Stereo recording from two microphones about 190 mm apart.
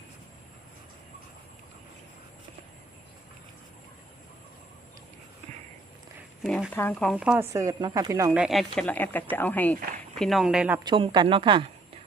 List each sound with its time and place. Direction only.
6.4 s speech: centre (ahead or behind); by 8.3 s 20° right (ahead or behind)
8.3 s speech: 5° right (ahead or behind)
10.8 s speech: 25° right (ahead or behind)